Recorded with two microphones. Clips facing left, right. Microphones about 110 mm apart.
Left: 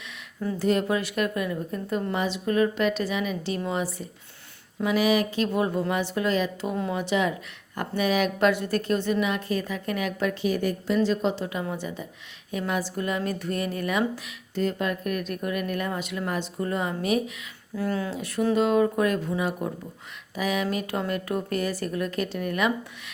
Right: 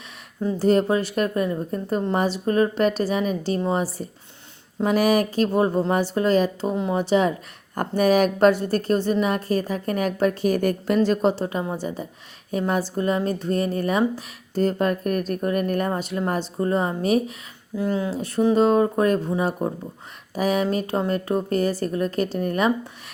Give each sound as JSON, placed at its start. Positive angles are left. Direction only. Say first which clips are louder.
{"t": 0.6, "sound": "speech", "louder": "right 5 dB", "side_deg": -35}
{"t": 17.7, "sound": "speech", "louder": "right 4 dB", "side_deg": -20}
{"t": 18.1, "sound": "speech", "louder": "right 6 dB", "side_deg": -35}